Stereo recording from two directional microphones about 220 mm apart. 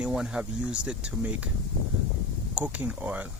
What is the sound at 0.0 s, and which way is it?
Speech, 5° right (ahead or behind).